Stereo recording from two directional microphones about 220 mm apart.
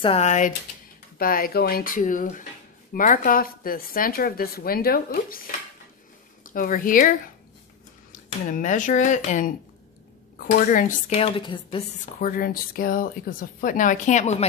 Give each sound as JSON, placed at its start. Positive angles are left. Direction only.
{"t": 0.0, "sound": "speech", "side_deg": 30}
{"t": 1.1, "sound": "speech", "side_deg": 40}
{"t": 6.5, "sound": "speech", "side_deg": 40}
{"t": 12.2, "sound": "speech", "side_deg": 40}